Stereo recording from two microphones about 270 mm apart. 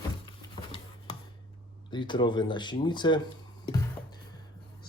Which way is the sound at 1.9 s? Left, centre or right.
Centre.